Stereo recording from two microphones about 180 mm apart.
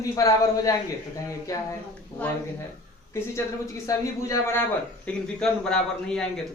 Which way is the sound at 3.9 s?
15° left (ahead or behind).